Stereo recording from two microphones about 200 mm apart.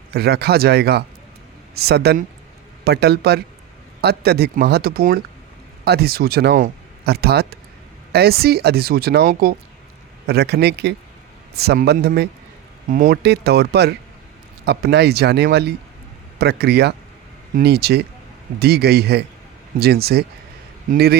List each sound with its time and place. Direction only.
0.1 s speech: 55° right (ahead or behind)